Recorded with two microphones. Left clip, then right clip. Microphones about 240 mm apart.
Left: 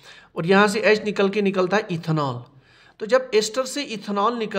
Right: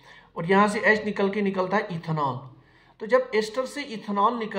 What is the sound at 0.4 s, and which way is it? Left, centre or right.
Speech, left.